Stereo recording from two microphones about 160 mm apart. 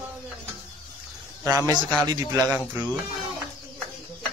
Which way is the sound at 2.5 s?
10° right (ahead or behind).